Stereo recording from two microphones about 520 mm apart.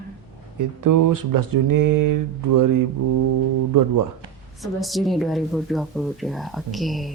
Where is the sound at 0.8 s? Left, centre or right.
Right.